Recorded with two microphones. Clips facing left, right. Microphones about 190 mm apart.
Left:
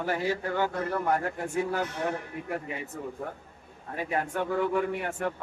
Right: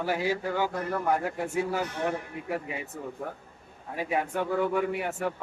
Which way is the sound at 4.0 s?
5° right (ahead or behind).